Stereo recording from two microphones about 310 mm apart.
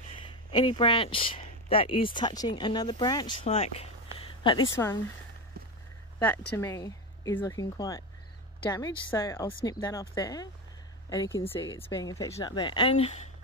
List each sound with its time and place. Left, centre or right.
0.3 s speech: centre
6.1 s speech: centre